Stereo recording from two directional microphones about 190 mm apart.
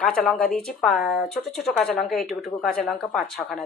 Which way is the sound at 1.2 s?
Centre (ahead or behind).